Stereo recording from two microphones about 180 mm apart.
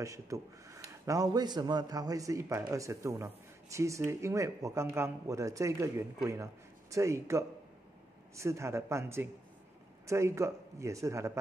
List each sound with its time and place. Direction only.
0.0 s a man's voice: 15° right (ahead or behind)